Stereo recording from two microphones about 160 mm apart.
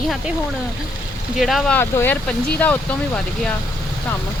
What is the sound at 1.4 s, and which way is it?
Speech, centre (ahead or behind).